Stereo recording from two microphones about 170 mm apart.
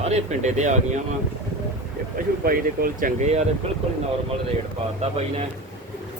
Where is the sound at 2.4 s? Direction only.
60° right (ahead or behind).